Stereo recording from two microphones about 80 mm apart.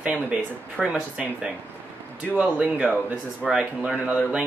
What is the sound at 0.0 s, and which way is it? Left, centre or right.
Speech, right.